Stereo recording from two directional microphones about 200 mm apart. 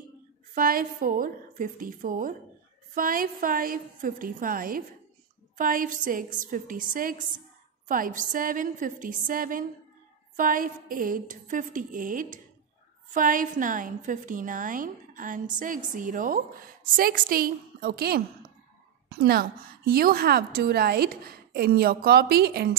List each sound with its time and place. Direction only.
0.6 s a woman's voice: 45° right (ahead or behind)